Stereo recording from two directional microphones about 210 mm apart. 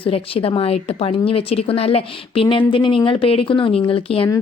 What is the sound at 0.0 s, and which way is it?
A woman's voice, 25° left (ahead or behind).